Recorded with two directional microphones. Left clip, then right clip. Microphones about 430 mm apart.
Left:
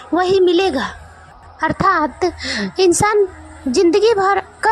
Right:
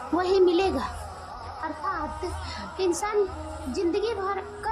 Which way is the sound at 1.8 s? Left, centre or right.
Centre.